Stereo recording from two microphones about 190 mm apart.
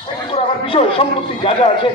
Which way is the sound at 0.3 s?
30° left (ahead or behind).